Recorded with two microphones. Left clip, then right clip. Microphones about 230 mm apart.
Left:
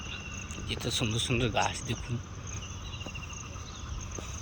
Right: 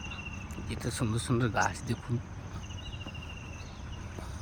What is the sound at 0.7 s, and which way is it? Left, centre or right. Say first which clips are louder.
Speech: left 4 dB; centre.